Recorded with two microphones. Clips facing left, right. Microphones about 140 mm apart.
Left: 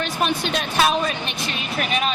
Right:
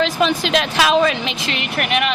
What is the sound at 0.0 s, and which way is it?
A woman's voice, 90° right.